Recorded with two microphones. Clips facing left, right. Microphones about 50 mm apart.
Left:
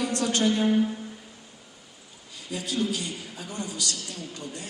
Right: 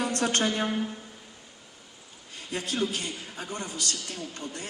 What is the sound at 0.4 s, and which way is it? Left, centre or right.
Speech, right.